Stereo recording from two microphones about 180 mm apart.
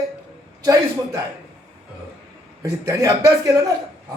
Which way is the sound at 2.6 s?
20° right (ahead or behind).